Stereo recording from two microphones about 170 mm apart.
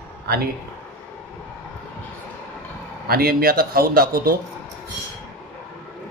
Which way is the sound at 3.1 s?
65° right (ahead or behind).